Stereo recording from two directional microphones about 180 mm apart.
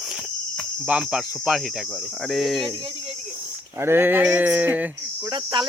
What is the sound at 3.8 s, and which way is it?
Speech, 10° right (ahead or behind).